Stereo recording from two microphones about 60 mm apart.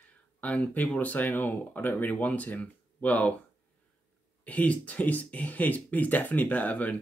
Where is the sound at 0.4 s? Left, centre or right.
Left.